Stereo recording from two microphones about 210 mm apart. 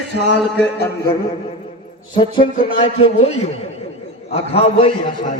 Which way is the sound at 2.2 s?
25° left (ahead or behind).